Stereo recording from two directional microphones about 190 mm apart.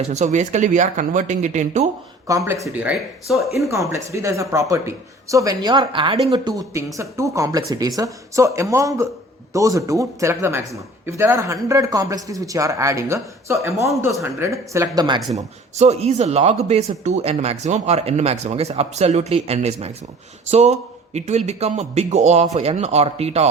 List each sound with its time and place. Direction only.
0.0 s speech: 35° right (ahead or behind)
2.2 s a man's voice: 15° right (ahead or behind)
3.7 s a man's voice: 15° right (ahead or behind)
15.7 s speech: 35° right (ahead or behind)